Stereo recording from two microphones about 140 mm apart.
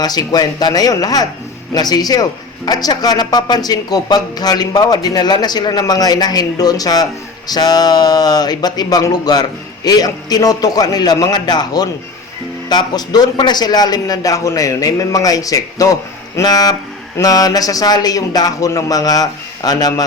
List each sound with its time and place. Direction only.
0.0 s a man's voice: 30° left (ahead or behind)